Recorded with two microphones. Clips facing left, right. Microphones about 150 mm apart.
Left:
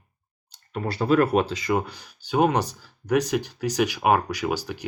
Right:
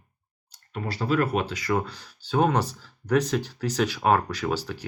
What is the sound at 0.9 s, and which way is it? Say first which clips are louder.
Speech: left 5 dB; 50° left (ahead or behind).